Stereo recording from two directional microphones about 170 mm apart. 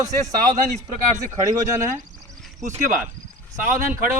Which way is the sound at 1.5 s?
20° right (ahead or behind).